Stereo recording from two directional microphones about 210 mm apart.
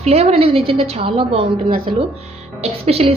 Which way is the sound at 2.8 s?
30° right (ahead or behind).